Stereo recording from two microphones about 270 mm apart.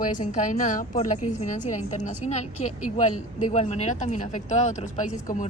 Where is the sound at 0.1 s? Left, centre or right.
Left.